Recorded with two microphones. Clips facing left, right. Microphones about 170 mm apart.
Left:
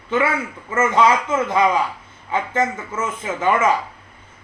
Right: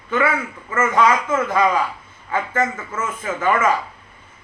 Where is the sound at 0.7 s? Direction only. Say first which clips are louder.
Left 1 dB; 20° left (ahead or behind).